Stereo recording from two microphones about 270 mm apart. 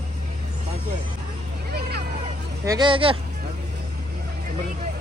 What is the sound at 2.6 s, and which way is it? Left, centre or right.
Speech, centre.